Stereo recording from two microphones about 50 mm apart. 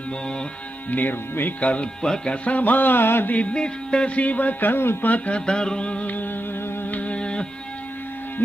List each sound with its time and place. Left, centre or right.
0.8 s music: left
1.6 s speech: left
2.0 s music: centre
2.4 s music: left
3.3 s speech: centre; by 4.9 s left
5.0 s music: left
5.5 s speech: centre
6.9 s music: left